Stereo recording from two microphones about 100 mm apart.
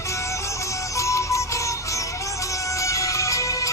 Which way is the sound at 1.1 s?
30° left (ahead or behind).